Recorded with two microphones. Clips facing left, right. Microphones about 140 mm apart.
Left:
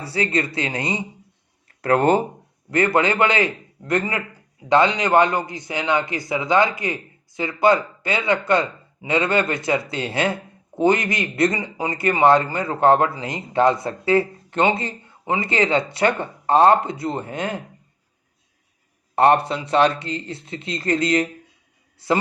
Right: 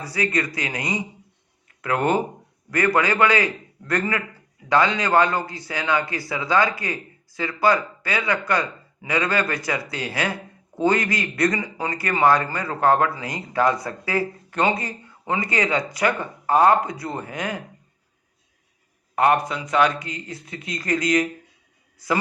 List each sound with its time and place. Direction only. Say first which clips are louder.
0.0 s a man's voice: left 2 dB; 30° left (ahead or behind)
1.6 s a sound: left 5 dB; 35° left (ahead or behind)
2.6 s a man's voice: left 2 dB; 25° left (ahead or behind)
19.1 s a man's voice: left 3 dB; 30° left (ahead or behind)